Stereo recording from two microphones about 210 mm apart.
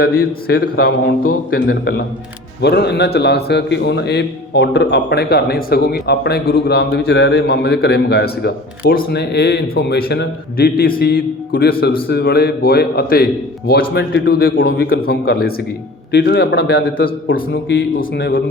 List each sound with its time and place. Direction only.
0.0 s a man's voice: 45° left (ahead or behind)